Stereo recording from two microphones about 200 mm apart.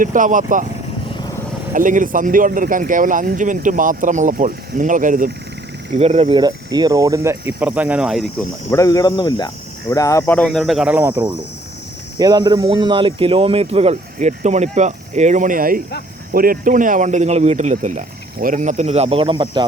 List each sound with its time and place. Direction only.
0.0 s speech: 40° right (ahead or behind)
1.7 s speech: 40° right (ahead or behind); by 8.4 s centre (ahead or behind)
8.7 s speech: 15° left (ahead or behind); by 11.3 s 10° right (ahead or behind)
12.2 s speech: 20° right (ahead or behind)